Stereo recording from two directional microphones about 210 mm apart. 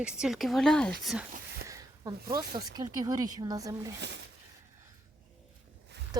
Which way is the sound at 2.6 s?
15° right (ahead or behind).